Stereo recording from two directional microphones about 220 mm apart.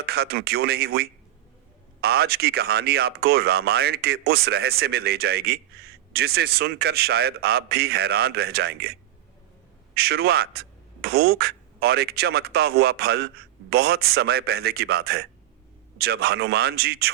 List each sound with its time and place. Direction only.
0.0 s speech: 45° right (ahead or behind)